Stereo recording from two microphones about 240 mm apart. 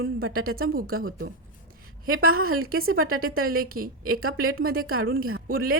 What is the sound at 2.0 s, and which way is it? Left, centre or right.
A woman's voice, right.